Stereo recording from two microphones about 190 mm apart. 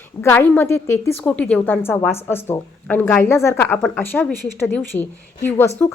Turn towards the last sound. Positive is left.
turn(degrees=10)  # may be behind; listen again after turning